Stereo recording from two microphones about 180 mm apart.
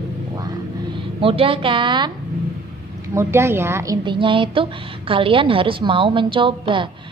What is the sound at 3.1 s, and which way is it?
A woman's voice, 15° right (ahead or behind).